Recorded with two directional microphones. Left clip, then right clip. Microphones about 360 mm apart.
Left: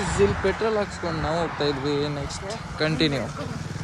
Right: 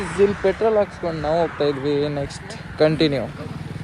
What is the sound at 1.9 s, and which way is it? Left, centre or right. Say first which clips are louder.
Speech: right 4 dB; centre.